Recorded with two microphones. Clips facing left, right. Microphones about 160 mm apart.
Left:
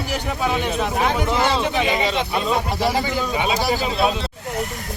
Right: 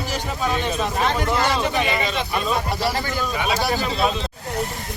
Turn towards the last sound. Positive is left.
turn(degrees=15)  # may be behind; listen again after turning